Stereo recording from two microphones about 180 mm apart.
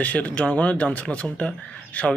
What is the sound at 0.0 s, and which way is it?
A man's voice, 10° left (ahead or behind).